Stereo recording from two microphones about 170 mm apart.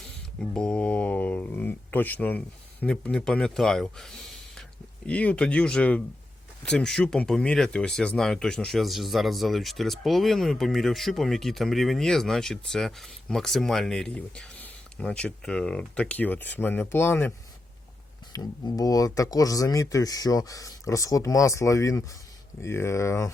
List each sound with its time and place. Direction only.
0.0 s a sound: 5° left (ahead or behind)
2.8 s speech: 5° left (ahead or behind)
18.3 s speech: 20° left (ahead or behind)